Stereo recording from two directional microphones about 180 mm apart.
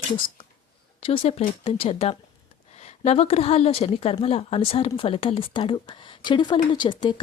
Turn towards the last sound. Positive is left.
turn(degrees=30)  # may be behind; listen again after turning